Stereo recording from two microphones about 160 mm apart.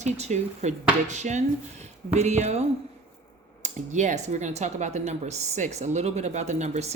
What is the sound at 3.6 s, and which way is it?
Speech, 50° right (ahead or behind).